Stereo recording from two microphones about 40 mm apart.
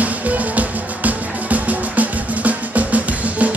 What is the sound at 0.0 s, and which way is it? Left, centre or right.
Music, right.